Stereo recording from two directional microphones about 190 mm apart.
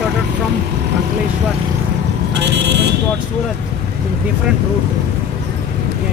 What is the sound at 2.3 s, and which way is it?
Vehicle, 65° right (ahead or behind).